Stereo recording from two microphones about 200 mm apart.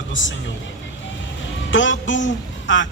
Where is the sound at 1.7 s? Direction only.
70° left (ahead or behind).